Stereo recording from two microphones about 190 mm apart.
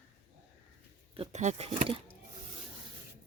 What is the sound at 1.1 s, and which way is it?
Speech, 35° right (ahead or behind).